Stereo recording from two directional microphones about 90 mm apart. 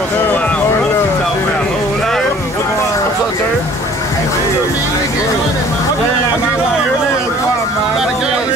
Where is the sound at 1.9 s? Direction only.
5° left (ahead or behind).